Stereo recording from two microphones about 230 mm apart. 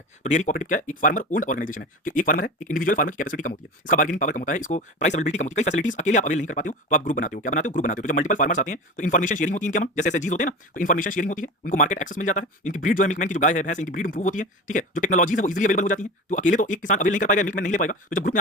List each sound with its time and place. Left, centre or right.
0.2 s speech: left